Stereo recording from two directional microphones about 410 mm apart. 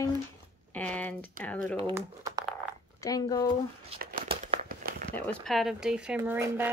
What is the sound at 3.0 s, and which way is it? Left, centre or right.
Speech, centre.